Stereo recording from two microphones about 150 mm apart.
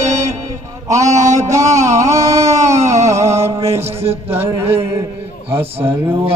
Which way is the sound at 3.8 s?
45° right (ahead or behind).